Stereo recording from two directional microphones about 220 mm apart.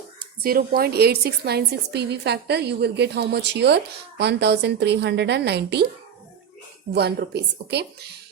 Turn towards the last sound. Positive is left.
turn(degrees=-50)  # may be behind; listen again after turning